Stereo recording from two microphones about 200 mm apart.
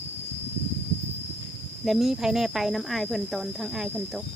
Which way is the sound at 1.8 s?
Centre (ahead or behind).